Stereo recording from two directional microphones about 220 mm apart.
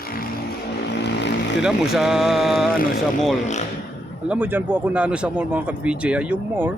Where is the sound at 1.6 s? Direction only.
Centre (ahead or behind).